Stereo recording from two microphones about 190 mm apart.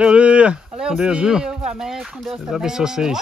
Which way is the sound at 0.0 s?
5° right (ahead or behind).